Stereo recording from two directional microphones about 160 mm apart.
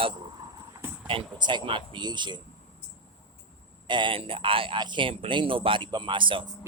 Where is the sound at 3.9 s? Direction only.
30° right (ahead or behind).